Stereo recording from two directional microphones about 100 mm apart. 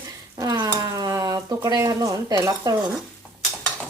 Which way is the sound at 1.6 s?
35° right (ahead or behind).